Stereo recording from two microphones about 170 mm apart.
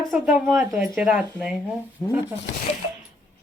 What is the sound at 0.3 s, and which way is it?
Speech, centre (ahead or behind).